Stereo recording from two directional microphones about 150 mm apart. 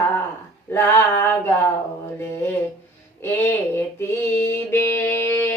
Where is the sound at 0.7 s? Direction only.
15° left (ahead or behind).